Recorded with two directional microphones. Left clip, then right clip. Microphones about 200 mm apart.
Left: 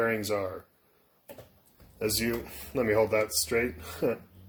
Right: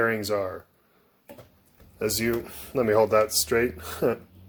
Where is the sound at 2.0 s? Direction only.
20° right (ahead or behind).